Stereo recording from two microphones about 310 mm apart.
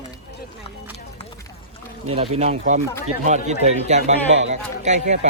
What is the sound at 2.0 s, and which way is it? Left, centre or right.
A man's voice, centre.